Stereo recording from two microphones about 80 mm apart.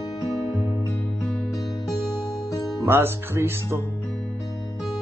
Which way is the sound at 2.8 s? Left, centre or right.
Right.